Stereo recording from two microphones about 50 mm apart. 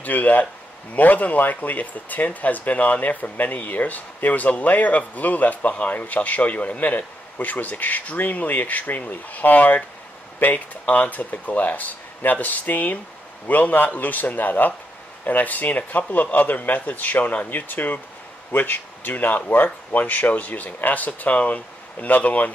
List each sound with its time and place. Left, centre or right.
0.0 s speech: left